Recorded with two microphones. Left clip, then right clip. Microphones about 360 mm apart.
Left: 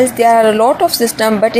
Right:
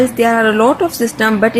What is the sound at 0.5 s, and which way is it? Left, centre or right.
Speech, left.